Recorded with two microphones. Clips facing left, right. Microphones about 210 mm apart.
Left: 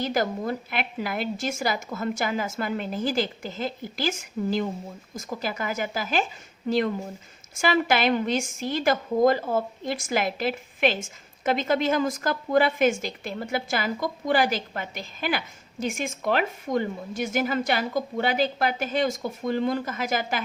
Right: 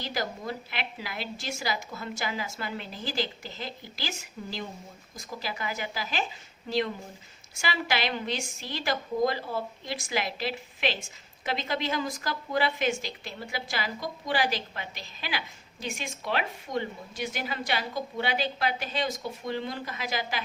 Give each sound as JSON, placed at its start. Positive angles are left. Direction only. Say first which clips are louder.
{"t": 0.0, "sound": "a woman's voice", "louder": "left 7 dB", "side_deg": 50}